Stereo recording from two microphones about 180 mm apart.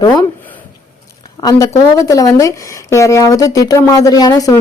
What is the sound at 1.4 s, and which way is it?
A man's voice, 20° left (ahead or behind).